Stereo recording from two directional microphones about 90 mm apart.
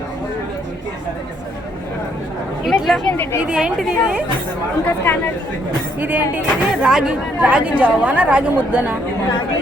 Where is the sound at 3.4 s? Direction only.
10° right (ahead or behind).